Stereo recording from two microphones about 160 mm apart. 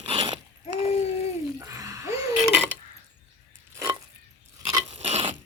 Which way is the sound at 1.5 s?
20° right (ahead or behind).